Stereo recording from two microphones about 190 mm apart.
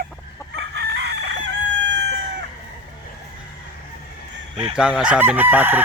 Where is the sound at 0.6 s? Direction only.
60° right (ahead or behind).